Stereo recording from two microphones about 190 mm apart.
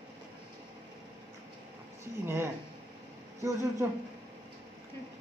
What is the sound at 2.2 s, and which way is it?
Speech, 10° right (ahead or behind).